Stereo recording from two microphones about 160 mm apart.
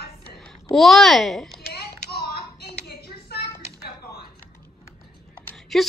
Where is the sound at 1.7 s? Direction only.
80° left.